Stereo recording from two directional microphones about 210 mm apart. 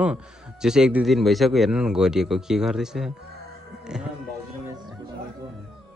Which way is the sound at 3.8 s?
5° right (ahead or behind).